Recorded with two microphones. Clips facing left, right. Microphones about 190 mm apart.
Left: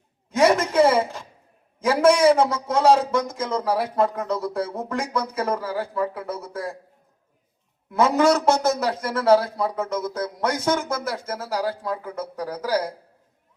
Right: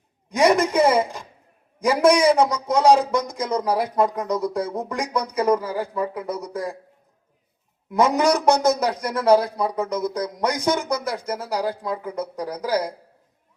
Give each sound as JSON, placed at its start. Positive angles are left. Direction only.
{"t": 0.3, "sound": "a sound", "side_deg": -15}
{"t": 1.8, "sound": "a man's voice", "side_deg": -15}
{"t": 7.9, "sound": "a man's voice", "side_deg": -15}